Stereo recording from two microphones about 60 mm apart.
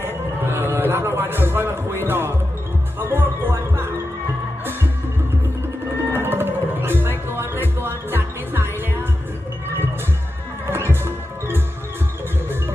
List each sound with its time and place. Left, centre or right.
0.0 s a sound: right
2.0 s music: right
6.1 s music: right
11.0 s music: right